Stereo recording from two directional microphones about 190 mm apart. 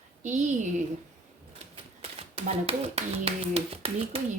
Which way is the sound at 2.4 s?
30° right (ahead or behind).